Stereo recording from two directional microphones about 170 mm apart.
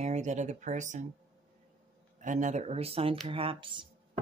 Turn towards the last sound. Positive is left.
turn(degrees=-30)  # may be behind; listen again after turning